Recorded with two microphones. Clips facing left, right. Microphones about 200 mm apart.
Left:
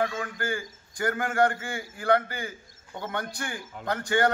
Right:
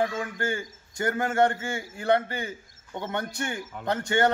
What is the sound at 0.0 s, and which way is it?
A man's voice, 25° right (ahead or behind).